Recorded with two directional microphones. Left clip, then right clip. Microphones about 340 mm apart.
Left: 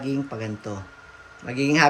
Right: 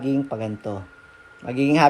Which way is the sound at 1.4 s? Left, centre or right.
Right.